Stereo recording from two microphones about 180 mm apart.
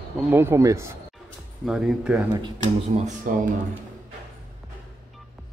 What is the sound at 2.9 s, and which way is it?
Speech, 40° right (ahead or behind).